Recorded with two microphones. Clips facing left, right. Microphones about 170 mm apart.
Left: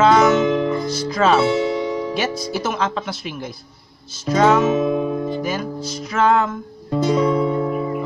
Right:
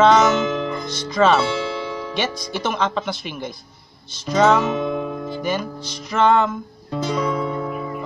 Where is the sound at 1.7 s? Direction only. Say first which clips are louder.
Left 6 dB; 20° left (ahead or behind).